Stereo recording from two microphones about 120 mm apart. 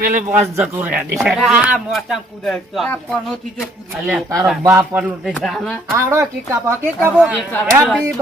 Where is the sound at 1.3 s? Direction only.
Centre (ahead or behind).